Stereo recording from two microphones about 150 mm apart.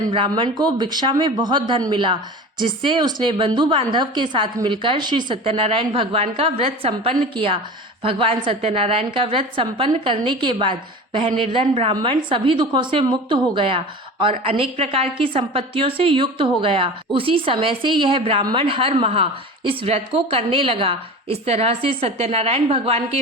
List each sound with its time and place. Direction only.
0.3 s a woman's voice: 30° right (ahead or behind)